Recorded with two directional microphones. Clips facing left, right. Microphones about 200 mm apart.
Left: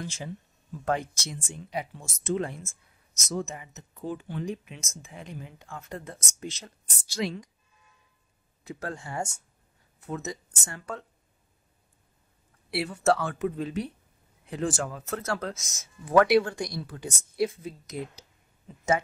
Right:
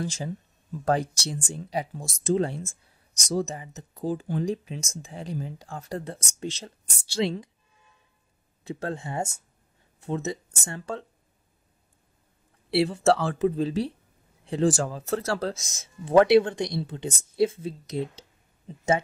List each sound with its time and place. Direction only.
0.0 s speech: 35° right (ahead or behind)
1.5 s speech: 35° right (ahead or behind)
8.6 s speech: 25° right (ahead or behind)
12.7 s speech: 30° right (ahead or behind)